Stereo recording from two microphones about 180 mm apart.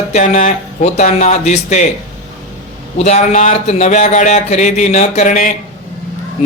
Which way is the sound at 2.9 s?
40° left (ahead or behind).